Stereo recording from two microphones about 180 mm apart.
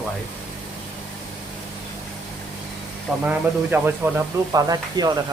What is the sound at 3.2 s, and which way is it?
Speech, 10° right (ahead or behind).